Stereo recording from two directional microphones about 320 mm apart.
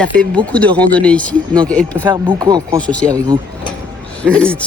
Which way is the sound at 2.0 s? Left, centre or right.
Centre.